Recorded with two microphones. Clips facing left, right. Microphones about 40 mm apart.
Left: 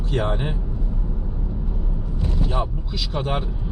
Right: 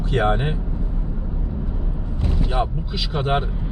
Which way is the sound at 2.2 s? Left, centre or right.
Centre.